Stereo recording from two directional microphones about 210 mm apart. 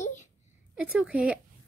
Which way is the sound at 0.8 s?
5° right (ahead or behind).